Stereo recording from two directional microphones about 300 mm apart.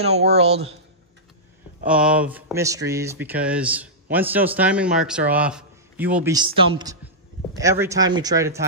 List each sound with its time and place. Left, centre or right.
0.3 s speech: right
1.9 s speech: centre